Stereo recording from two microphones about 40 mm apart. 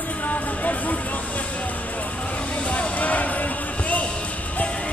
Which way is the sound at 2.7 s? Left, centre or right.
Left.